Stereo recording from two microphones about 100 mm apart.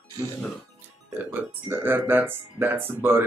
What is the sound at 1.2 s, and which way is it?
Speech, 25° right (ahead or behind).